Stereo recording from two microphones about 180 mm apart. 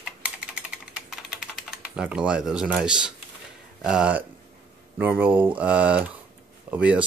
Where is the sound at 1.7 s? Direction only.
5° right (ahead or behind).